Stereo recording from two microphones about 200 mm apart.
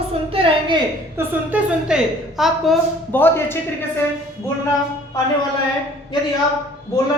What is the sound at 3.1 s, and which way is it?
Speech, 10° left (ahead or behind).